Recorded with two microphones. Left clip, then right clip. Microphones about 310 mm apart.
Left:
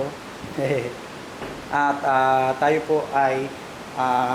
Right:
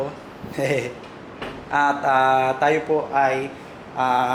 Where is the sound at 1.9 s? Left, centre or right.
Centre.